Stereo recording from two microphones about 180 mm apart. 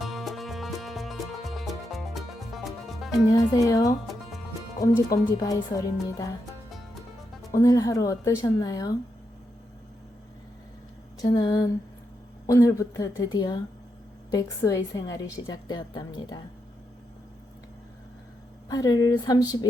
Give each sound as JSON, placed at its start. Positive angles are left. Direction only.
{"t": 0.0, "sound": "music", "side_deg": 0}
{"t": 3.3, "sound": "a woman's voice", "side_deg": 20}
{"t": 4.0, "sound": "music", "side_deg": 0}
{"t": 4.8, "sound": "a woman's voice", "side_deg": 20}
{"t": 7.5, "sound": "a woman's voice", "side_deg": 20}
{"t": 11.2, "sound": "a woman's voice", "side_deg": 20}
{"t": 18.7, "sound": "a woman's voice", "side_deg": 25}